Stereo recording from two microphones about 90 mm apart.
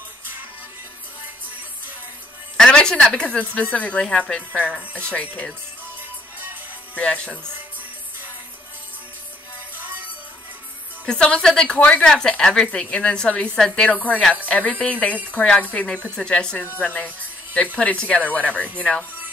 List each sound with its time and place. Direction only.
2.5 s speech: 10° left (ahead or behind)
4.6 s speech: 15° right (ahead or behind)
5.0 s speech: 15° left (ahead or behind)
7.0 s speech: 15° left (ahead or behind)
9.8 s music: 20° right (ahead or behind)
11.1 s speech: 10° left (ahead or behind)